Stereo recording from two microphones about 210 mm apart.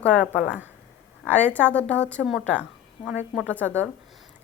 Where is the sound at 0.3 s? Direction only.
5° right (ahead or behind).